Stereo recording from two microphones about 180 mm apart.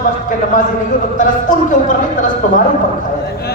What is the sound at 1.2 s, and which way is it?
Speech, 45° left (ahead or behind).